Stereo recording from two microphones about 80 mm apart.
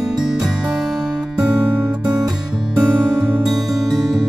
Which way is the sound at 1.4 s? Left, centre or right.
Centre.